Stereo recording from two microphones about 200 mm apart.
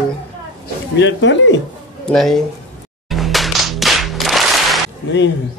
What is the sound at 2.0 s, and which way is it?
Speech, centre (ahead or behind).